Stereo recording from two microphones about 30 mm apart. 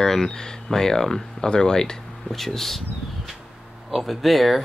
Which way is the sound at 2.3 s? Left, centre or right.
Centre.